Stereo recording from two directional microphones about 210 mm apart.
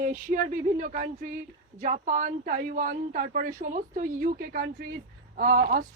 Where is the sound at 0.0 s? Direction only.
40° right (ahead or behind).